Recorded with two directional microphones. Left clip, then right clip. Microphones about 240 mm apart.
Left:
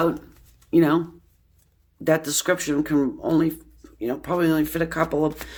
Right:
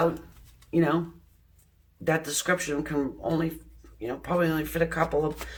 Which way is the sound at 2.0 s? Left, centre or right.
Left.